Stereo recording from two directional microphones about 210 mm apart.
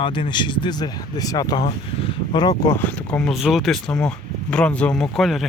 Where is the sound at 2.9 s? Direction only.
5° left (ahead or behind).